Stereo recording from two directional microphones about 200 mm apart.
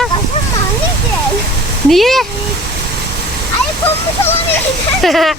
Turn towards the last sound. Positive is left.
turn(degrees=0)  # may be behind; listen again after turning